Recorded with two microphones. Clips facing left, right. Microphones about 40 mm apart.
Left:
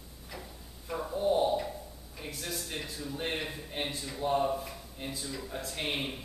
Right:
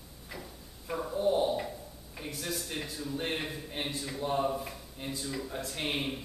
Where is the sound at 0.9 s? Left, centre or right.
Centre.